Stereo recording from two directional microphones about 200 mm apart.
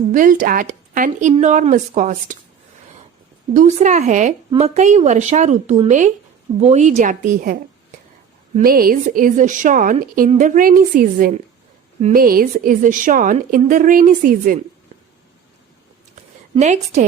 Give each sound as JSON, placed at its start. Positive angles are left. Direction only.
{"t": 0.1, "sound": "a woman's voice", "side_deg": -40}
{"t": 3.5, "sound": "a woman's voice", "side_deg": -35}
{"t": 16.6, "sound": "a woman's voice", "side_deg": -35}